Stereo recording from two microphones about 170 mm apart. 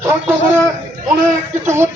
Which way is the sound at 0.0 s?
15° right (ahead or behind).